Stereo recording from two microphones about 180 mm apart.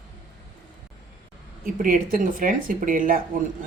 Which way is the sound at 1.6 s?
50° right (ahead or behind).